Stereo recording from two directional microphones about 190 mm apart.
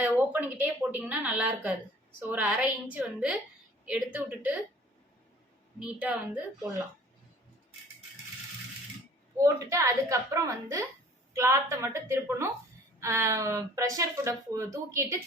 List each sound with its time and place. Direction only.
0.0 s a woman's voice: 10° right (ahead or behind)
5.8 s speech: 5° right (ahead or behind)
9.4 s speech: 15° right (ahead or behind)